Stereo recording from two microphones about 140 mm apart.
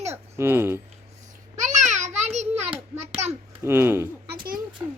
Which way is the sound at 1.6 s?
60° right (ahead or behind).